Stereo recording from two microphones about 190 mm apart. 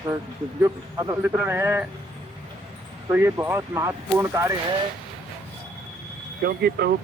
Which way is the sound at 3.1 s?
10° right (ahead or behind).